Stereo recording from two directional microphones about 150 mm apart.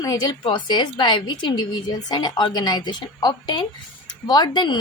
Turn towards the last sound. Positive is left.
turn(degrees=30)  # may be behind; listen again after turning